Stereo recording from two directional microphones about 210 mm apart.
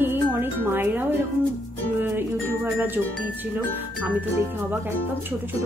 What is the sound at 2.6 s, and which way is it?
Speech, 10° right (ahead or behind).